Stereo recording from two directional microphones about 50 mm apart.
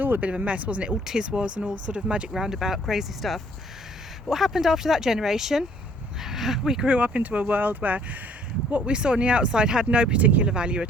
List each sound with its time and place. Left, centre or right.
0.0 s speech: right
0.3 s speech: right
1.0 s speech: centre
2.3 s speech: centre; by 8.0 s right
8.7 s speech: right